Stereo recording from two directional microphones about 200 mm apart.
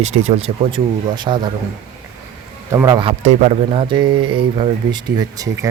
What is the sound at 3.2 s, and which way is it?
Speech, 35° right (ahead or behind).